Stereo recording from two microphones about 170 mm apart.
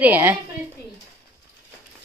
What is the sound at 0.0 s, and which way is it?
Speech, 10° right (ahead or behind).